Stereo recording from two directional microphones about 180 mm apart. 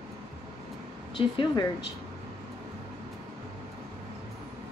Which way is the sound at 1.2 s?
25° left (ahead or behind).